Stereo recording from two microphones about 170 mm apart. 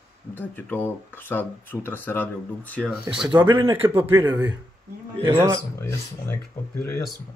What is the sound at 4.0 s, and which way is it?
Speech, 15° right (ahead or behind).